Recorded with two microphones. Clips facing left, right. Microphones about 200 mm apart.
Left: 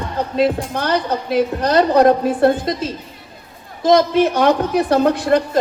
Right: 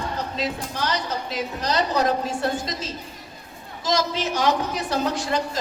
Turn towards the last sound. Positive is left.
turn(degrees=55)  # may be behind; listen again after turning